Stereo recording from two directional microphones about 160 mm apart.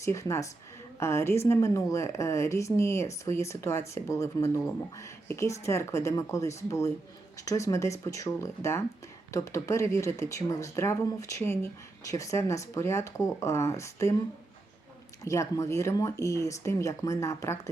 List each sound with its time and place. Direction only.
0.0 s a woman's voice: 20° left (ahead or behind)
15.2 s speech: 20° left (ahead or behind)